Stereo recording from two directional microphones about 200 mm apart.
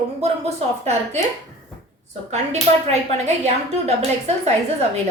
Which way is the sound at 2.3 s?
35° right (ahead or behind).